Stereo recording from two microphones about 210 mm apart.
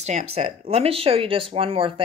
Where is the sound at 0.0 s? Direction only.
30° right (ahead or behind).